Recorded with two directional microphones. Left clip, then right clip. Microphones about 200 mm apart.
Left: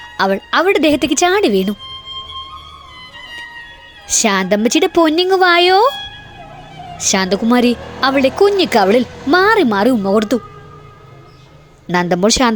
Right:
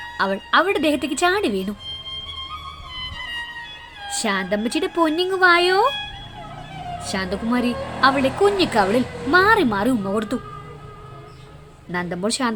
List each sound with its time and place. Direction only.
0.2 s speech: 30° left (ahead or behind)
4.0 s speech: 35° left (ahead or behind)
7.0 s speech: 40° left (ahead or behind)
11.9 s a woman's voice: 45° left (ahead or behind)